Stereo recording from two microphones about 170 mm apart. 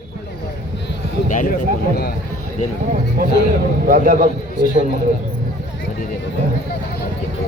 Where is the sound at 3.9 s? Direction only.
55° right (ahead or behind).